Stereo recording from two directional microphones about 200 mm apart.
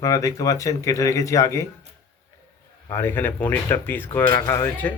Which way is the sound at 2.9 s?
10° left (ahead or behind).